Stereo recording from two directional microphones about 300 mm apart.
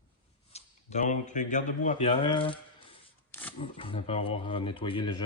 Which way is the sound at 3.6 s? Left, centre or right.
Centre.